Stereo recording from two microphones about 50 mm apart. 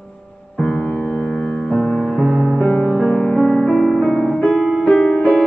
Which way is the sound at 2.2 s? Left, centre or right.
Centre.